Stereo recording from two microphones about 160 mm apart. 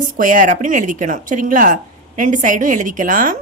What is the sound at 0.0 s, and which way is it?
A woman's voice, 55° right (ahead or behind).